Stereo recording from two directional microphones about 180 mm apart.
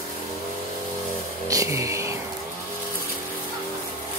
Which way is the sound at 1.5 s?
15° right (ahead or behind).